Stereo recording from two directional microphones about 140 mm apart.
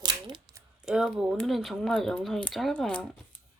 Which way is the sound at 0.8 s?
5° right (ahead or behind).